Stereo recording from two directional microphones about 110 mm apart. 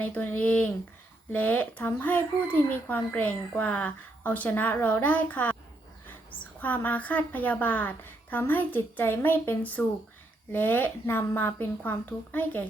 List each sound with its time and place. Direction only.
0.0 s speech: 15° left (ahead or behind)